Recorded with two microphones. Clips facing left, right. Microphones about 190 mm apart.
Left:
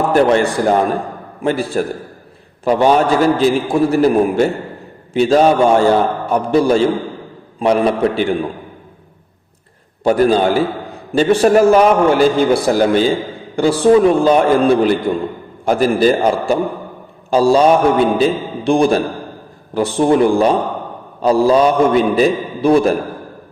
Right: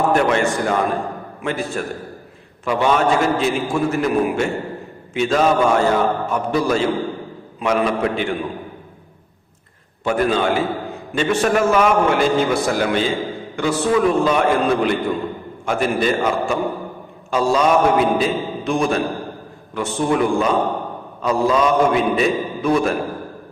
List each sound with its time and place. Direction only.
0.1 s a man's voice: 35° left (ahead or behind)
10.0 s a man's voice: 35° left (ahead or behind)